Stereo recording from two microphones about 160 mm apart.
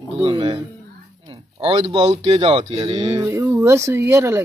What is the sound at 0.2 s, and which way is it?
Speech, 30° right (ahead or behind).